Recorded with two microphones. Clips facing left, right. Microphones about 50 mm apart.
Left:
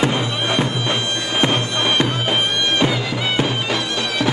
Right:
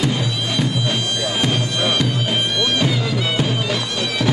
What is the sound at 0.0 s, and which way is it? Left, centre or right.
Bagpipes, left.